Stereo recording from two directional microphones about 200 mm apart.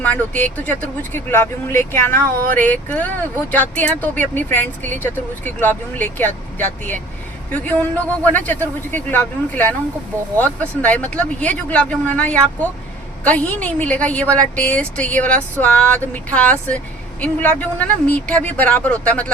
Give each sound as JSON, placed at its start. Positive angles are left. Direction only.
{"t": 0.0, "sound": "speech", "side_deg": 10}